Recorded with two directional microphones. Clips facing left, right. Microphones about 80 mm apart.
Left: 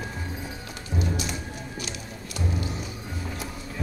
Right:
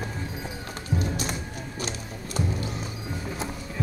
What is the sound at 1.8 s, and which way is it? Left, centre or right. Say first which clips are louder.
Music: right 2 dB; right.